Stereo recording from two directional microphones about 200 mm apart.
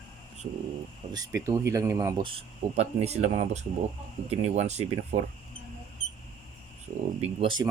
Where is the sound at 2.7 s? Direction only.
30° right (ahead or behind).